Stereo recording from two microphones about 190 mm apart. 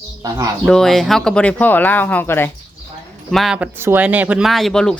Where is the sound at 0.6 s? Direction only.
5° left (ahead or behind).